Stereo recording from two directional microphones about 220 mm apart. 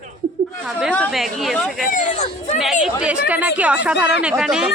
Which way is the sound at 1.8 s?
35° left (ahead or behind).